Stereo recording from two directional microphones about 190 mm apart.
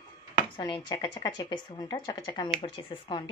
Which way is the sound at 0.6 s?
20° left (ahead or behind).